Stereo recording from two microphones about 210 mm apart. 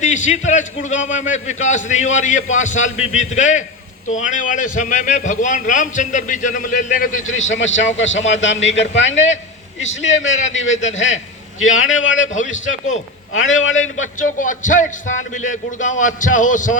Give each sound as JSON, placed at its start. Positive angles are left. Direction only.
{"t": 0.0, "sound": "a man's voice", "side_deg": 35}
{"t": 7.3, "sound": "a man's voice", "side_deg": 65}
{"t": 10.8, "sound": "a man's voice", "side_deg": 35}
{"t": 11.6, "sound": "a man's voice", "side_deg": 70}
{"t": 14.0, "sound": "a man's voice", "side_deg": 40}